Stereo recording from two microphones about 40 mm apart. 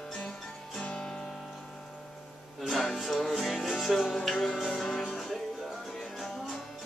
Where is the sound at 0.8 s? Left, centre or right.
Centre.